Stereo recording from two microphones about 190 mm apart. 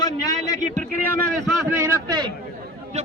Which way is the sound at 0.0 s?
20° left (ahead or behind).